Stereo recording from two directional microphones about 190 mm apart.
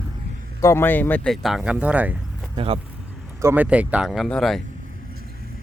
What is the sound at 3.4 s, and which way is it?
Speech, 10° right (ahead or behind).